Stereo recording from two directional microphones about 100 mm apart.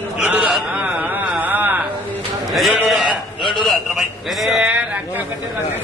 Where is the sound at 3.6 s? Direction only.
Centre (ahead or behind).